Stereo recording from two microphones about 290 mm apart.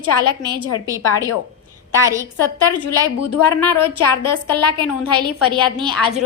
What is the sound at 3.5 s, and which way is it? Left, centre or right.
Speech, centre.